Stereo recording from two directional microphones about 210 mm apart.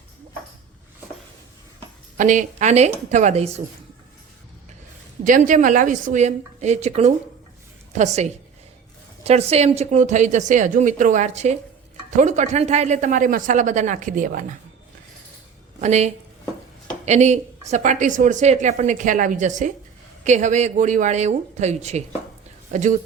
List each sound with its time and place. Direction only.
2.1 s a woman's voice: 35° right (ahead or behind)
5.2 s a woman's voice: 40° right (ahead or behind)
15.8 s a woman's voice: 35° right (ahead or behind)